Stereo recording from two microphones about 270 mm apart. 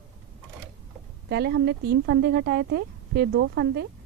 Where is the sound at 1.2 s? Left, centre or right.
Right.